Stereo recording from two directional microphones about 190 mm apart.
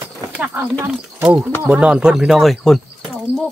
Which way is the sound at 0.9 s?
5° right (ahead or behind).